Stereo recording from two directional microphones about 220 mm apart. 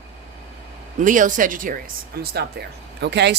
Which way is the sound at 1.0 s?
35° right (ahead or behind).